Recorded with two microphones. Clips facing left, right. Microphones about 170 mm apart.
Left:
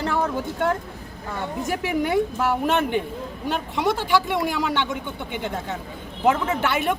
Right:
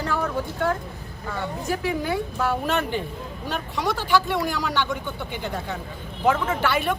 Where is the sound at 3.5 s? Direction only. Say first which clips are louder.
Left 3 dB; 20° left (ahead or behind).